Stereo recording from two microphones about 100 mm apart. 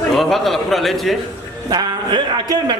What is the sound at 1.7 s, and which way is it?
Speech, 45° right (ahead or behind).